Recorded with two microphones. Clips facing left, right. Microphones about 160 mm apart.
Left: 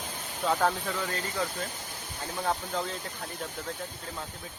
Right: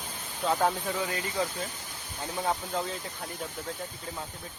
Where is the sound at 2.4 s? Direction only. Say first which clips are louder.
Even; 5° right (ahead or behind).